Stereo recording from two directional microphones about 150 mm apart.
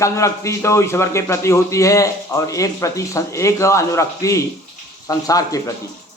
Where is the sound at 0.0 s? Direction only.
20° left (ahead or behind).